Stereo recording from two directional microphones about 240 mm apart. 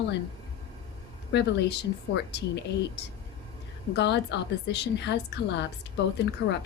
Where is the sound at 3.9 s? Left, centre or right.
Left.